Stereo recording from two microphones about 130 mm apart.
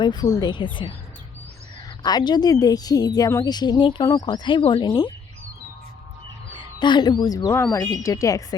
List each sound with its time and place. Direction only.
0.0 s a woman's voice: 35° left (ahead or behind)
2.0 s a woman's voice: 30° left (ahead or behind)
6.6 s speech: 35° left (ahead or behind)